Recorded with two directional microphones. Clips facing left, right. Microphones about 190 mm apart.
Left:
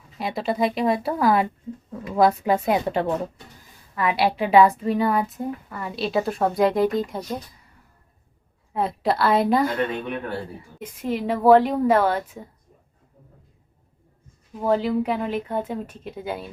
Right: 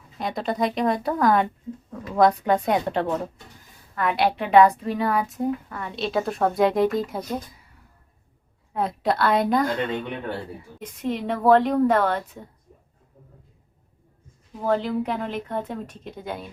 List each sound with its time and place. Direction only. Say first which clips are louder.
0.2 s a woman's voice: left 2 dB; 5° left (ahead or behind)
8.7 s a woman's voice: left 1 dB; centre (ahead or behind)
14.7 s a woman's voice: left 2 dB; 5° left (ahead or behind)